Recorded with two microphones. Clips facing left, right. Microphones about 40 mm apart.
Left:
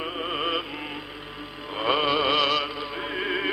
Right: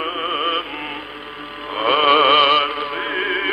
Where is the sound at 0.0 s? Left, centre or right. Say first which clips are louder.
Right 7 dB; right.